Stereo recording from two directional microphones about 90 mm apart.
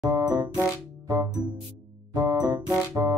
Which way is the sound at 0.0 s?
40° right (ahead or behind).